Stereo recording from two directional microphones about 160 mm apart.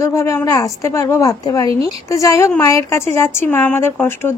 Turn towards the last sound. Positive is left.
turn(degrees=15)  # may be behind; listen again after turning